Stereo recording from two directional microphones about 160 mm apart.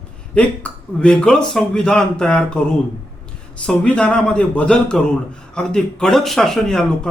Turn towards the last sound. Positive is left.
turn(degrees=5)  # may be behind; listen again after turning